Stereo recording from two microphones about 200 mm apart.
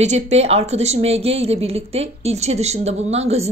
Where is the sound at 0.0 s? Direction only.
35° right (ahead or behind).